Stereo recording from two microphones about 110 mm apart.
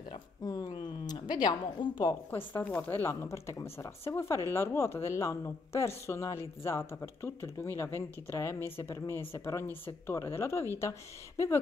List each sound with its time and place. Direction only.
0.4 s speech: 35° left (ahead or behind)
2.3 s speech: 15° left (ahead or behind)